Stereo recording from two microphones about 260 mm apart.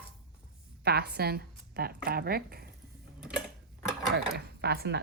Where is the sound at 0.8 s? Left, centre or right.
Right.